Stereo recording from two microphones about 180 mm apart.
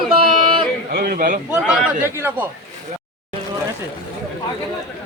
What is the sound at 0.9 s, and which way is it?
Speech, 55° right (ahead or behind).